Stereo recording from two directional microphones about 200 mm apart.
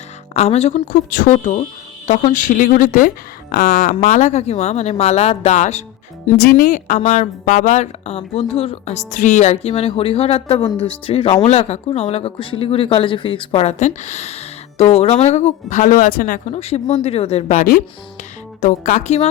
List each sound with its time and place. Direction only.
0.3 s speech: 35° left (ahead or behind)
6.3 s speech: 50° left (ahead or behind); by 19.3 s 35° left (ahead or behind)